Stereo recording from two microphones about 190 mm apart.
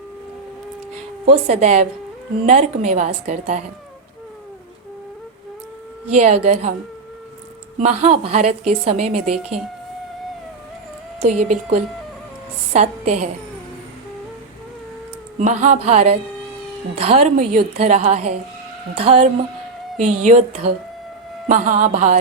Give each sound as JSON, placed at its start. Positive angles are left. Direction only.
{"t": 1.2, "sound": "a woman's voice", "side_deg": -35}
{"t": 6.1, "sound": "a woman's voice", "side_deg": -35}
{"t": 7.8, "sound": "a woman's voice", "side_deg": -35}
{"t": 11.2, "sound": "a woman's voice", "side_deg": -40}
{"t": 15.4, "sound": "a woman's voice", "side_deg": -40}